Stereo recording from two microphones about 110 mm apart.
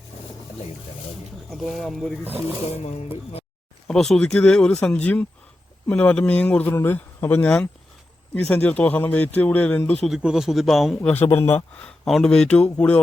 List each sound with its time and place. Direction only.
1.5 s speech: centre (ahead or behind)
3.8 s speech: 5° left (ahead or behind)
10.1 s speech: 5° right (ahead or behind)
11.1 s a man's voice: 20° left (ahead or behind)
11.8 s speech: 5° left (ahead or behind)